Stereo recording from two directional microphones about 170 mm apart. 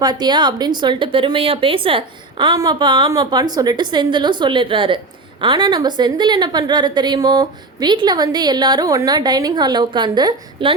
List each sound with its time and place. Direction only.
0.0 s a woman's voice: 25° right (ahead or behind)